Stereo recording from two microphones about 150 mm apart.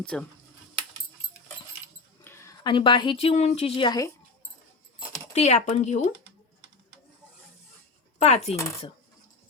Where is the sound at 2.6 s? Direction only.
30° left (ahead or behind).